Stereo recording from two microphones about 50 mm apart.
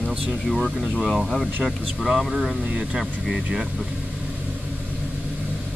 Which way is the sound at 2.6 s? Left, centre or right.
Right.